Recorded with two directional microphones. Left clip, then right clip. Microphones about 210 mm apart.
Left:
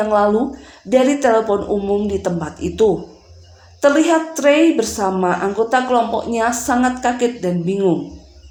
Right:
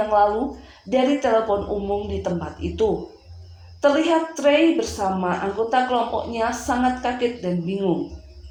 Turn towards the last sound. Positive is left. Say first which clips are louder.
# left 6 dB
turn(degrees=40)  # may be behind; listen again after turning